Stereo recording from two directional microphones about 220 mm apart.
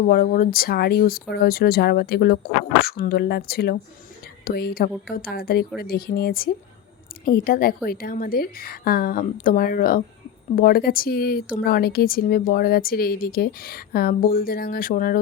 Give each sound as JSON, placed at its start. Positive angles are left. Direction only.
{"t": 0.1, "sound": "a woman's voice", "side_deg": 40}